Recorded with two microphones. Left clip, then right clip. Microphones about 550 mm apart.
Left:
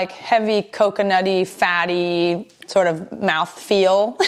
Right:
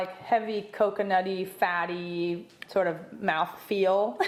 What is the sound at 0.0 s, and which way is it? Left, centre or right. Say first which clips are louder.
A woman's voice: left 9 dB; left.